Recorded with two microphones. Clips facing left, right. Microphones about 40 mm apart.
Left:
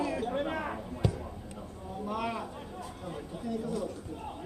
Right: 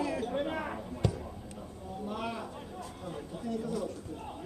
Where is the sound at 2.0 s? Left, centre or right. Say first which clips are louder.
Left 3 dB; left.